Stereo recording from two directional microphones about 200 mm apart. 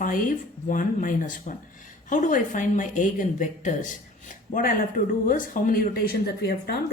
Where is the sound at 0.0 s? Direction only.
40° left (ahead or behind).